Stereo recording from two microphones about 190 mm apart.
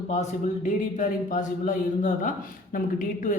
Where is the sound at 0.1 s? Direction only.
40° left (ahead or behind).